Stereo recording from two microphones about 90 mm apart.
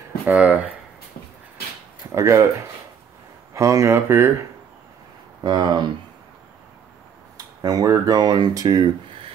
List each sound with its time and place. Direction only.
0.3 s speech: 15° right (ahead or behind)
2.1 s speech: 30° right (ahead or behind)
3.5 s speech: 35° right (ahead or behind)
5.4 s speech: 50° right (ahead or behind)
7.6 s speech: 40° right (ahead or behind); by 9.3 s 60° right (ahead or behind)